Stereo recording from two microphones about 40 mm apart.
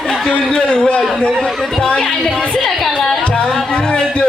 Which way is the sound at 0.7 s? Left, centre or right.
Left.